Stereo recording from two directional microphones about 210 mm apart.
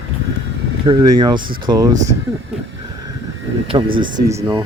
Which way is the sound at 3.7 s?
25° right (ahead or behind).